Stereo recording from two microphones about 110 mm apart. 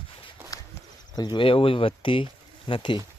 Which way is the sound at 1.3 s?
55° left (ahead or behind).